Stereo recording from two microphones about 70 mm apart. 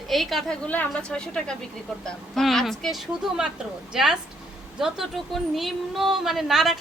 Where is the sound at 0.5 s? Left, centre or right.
Centre.